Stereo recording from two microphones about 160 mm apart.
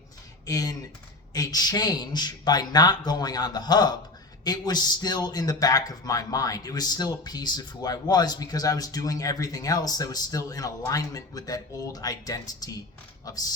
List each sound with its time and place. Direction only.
0.4 s a man's voice: 20° left (ahead or behind)